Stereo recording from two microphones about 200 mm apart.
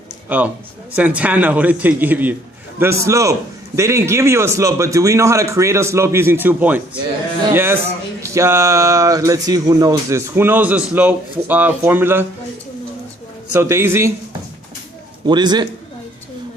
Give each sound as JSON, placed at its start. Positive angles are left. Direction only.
{"t": 0.3, "sound": "a man's voice", "side_deg": -10}
{"t": 13.5, "sound": "speech", "side_deg": -10}
{"t": 15.3, "sound": "a man's voice", "side_deg": -20}